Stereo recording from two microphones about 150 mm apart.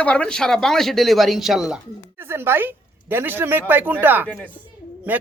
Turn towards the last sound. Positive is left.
turn(degrees=-10)  # may be behind; listen again after turning